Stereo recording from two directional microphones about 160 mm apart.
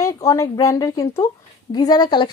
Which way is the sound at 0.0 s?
20° left (ahead or behind).